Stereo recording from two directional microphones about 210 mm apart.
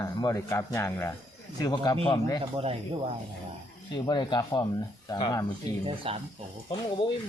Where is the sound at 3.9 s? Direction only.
20° left (ahead or behind).